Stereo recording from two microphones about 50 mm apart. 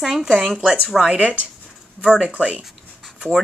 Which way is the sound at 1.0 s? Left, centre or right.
Right.